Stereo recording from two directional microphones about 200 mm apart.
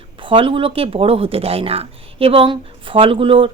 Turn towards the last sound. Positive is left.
turn(degrees=-25)  # may be behind; listen again after turning